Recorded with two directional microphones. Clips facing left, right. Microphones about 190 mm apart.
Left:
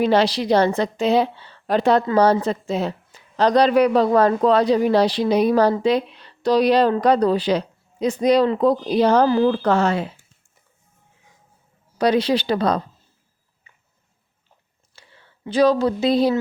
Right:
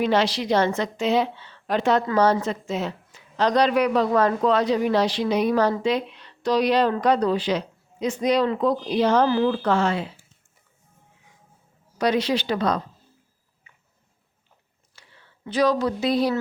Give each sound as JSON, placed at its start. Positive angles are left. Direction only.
{"t": 0.0, "sound": "a woman's voice", "side_deg": 35}
{"t": 11.9, "sound": "a woman's voice", "side_deg": 30}
{"t": 14.9, "sound": "a sound", "side_deg": 30}
{"t": 15.4, "sound": "speech", "side_deg": 30}